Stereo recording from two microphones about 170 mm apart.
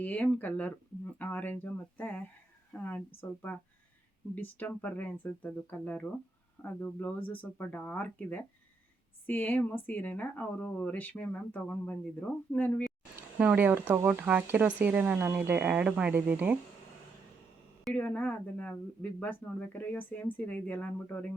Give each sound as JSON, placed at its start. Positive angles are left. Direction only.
{"t": 0.0, "sound": "speech", "side_deg": 10}
{"t": 13.4, "sound": "speech", "side_deg": -10}
{"t": 17.8, "sound": "speech", "side_deg": 10}